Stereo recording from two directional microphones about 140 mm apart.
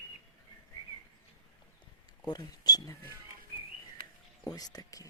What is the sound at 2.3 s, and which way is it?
Speech, 30° left (ahead or behind).